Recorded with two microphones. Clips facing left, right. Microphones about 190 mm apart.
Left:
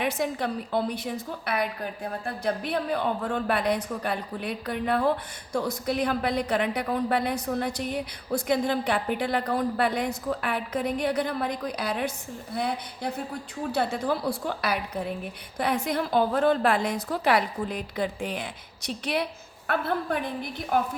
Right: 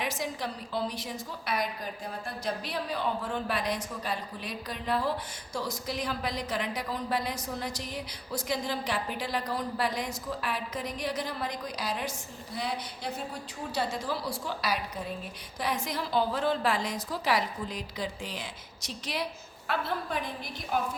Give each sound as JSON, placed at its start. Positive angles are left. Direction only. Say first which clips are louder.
{"t": 0.0, "sound": "a woman's voice", "louder": "left 6 dB", "side_deg": 55}